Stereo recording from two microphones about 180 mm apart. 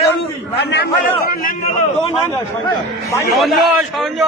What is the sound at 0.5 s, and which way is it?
A man's voice, 65° left (ahead or behind).